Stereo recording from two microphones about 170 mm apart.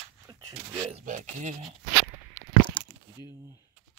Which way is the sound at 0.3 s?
20° right (ahead or behind).